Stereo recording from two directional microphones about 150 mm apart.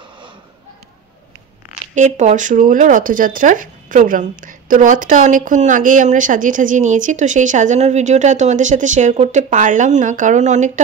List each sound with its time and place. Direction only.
2.0 s speech: 50° right (ahead or behind)